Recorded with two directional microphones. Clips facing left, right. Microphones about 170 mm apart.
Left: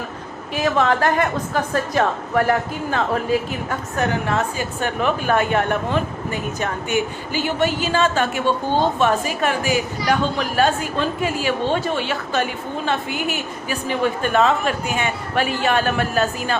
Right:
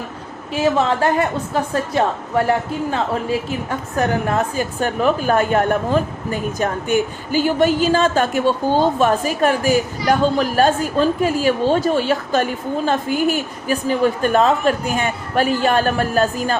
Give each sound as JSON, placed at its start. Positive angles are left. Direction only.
{"t": 0.5, "sound": "a woman's voice", "side_deg": -30}
{"t": 3.7, "sound": "a woman's voice", "side_deg": -40}